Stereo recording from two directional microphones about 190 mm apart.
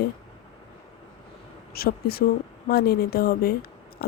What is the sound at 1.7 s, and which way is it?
Speech, 55° left (ahead or behind).